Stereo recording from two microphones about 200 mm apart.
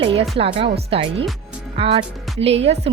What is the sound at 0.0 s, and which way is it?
A woman's voice, 30° right (ahead or behind).